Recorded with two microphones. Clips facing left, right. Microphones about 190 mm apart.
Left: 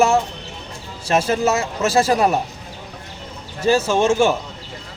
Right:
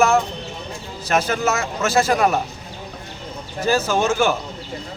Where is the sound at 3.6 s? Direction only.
25° left (ahead or behind).